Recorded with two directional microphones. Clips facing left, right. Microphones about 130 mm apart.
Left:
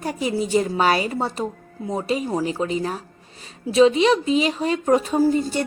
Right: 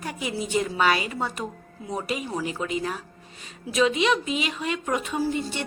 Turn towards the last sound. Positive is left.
turn(degrees=40)  # may be behind; listen again after turning